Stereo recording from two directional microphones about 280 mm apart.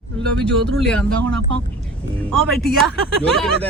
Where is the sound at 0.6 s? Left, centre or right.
Right.